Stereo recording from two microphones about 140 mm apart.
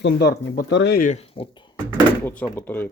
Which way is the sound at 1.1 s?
45° left (ahead or behind).